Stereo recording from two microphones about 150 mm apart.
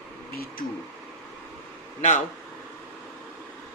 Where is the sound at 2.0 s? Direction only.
50° left (ahead or behind).